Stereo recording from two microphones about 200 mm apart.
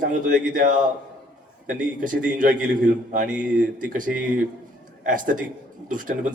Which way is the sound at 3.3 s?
5° right (ahead or behind).